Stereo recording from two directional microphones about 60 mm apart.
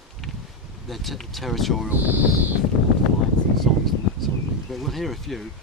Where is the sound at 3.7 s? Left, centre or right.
Centre.